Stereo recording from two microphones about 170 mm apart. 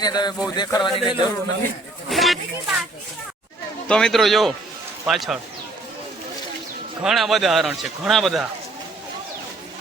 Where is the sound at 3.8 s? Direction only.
5° left (ahead or behind).